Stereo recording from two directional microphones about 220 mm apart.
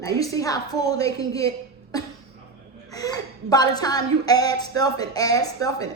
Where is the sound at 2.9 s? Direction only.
15° left (ahead or behind).